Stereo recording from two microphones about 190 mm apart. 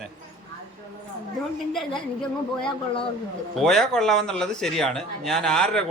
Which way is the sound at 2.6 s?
30° left (ahead or behind).